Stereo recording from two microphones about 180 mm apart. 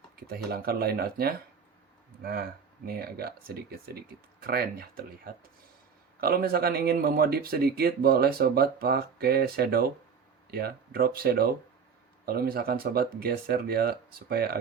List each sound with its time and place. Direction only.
0.2 s speech: 60° right (ahead or behind)
2.8 s speech: 55° right (ahead or behind)